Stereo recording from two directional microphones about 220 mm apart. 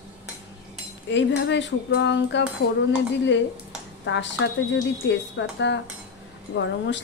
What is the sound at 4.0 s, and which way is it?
A woman's voice, 55° left (ahead or behind).